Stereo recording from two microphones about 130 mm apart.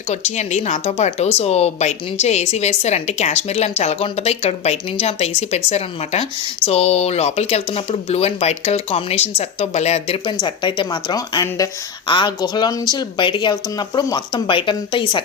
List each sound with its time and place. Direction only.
0.1 s speech: 60° left (ahead or behind)
10.4 s speech: 40° left (ahead or behind)